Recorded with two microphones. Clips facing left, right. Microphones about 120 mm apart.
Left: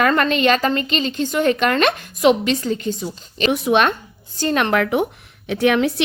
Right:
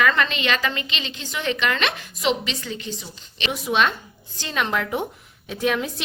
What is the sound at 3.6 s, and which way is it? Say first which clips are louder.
Speech: left 3 dB; 55° left (ahead or behind).